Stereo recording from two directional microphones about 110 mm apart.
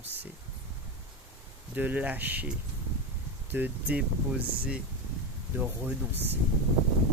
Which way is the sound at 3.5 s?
15° right (ahead or behind).